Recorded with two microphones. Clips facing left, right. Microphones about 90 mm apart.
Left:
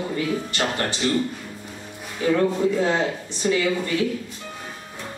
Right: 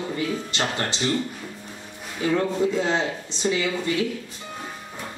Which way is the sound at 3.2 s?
20° right (ahead or behind).